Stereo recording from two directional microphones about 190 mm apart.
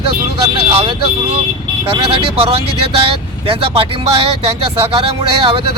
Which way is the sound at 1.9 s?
30° right (ahead or behind).